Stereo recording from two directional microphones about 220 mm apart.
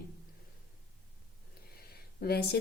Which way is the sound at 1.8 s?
45° left (ahead or behind).